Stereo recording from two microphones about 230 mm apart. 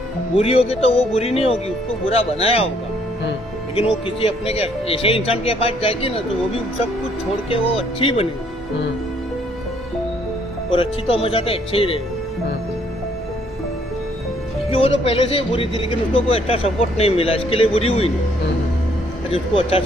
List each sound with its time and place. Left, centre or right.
0.3 s speech: left
3.8 s speech: left
7.5 s speech: left
10.7 s speech: left
14.7 s speech: left
19.3 s speech: left